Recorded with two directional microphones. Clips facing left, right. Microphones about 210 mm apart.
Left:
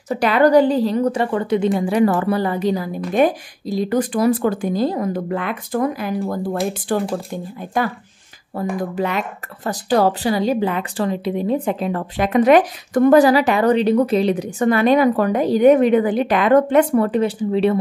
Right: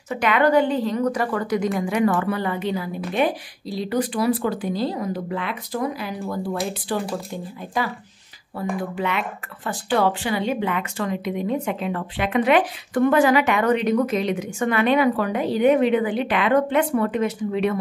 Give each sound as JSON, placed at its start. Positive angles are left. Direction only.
{"t": 0.1, "sound": "a woman's voice", "side_deg": 35}
{"t": 8.5, "sound": "speech", "side_deg": 40}